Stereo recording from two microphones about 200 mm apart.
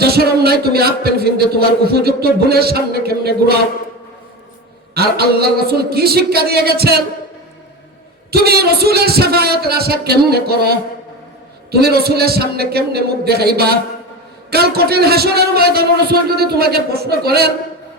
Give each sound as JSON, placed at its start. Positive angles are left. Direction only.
{"t": 0.0, "sound": "speech", "side_deg": -50}
{"t": 4.9, "sound": "speech", "side_deg": -50}
{"t": 8.3, "sound": "speech", "side_deg": -50}